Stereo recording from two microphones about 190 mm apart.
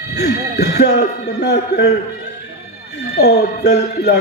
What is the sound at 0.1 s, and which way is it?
Speech, 60° left (ahead or behind).